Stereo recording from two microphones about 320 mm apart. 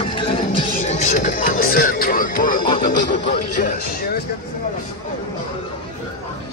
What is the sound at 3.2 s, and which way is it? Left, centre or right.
Speech, left.